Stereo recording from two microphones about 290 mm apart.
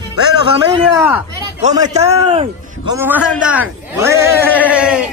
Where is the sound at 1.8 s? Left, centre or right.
Right.